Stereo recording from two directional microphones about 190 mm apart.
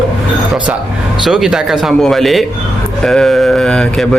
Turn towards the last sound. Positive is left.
turn(degrees=5)  # may be behind; listen again after turning